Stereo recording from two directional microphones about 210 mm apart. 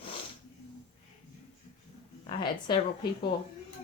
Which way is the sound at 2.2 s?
25° left (ahead or behind).